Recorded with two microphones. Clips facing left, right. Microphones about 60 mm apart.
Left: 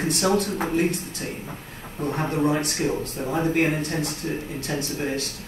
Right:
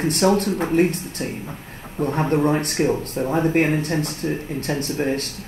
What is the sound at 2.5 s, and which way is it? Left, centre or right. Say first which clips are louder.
Speech: right 4 dB; right.